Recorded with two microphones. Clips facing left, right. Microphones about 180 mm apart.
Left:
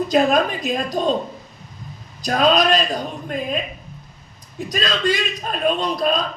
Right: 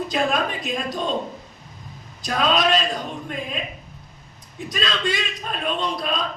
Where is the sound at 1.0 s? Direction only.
40° left (ahead or behind).